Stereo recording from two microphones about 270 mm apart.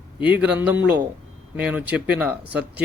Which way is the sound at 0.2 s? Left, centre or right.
Centre.